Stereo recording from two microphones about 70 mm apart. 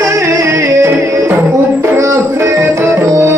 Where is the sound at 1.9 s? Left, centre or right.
Right.